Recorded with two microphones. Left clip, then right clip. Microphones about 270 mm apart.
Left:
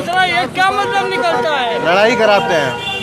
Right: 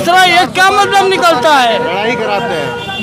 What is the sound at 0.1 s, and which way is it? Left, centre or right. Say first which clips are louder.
Speech: right 7 dB; right.